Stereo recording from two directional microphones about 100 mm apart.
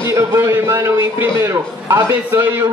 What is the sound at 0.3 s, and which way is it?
A man's voice, 30° right (ahead or behind).